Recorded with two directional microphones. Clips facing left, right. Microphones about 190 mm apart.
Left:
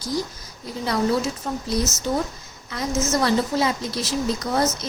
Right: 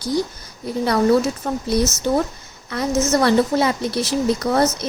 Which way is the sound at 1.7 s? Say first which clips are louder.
Right 5 dB; 65° right (ahead or behind).